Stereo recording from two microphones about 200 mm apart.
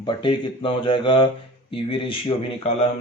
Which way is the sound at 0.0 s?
25° left (ahead or behind).